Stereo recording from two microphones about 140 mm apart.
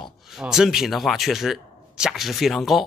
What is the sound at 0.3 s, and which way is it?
Speech, 5° right (ahead or behind).